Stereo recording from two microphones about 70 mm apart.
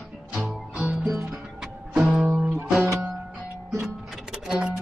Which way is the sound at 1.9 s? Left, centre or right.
Centre.